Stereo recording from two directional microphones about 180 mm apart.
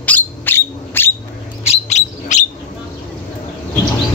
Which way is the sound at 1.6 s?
40° left (ahead or behind).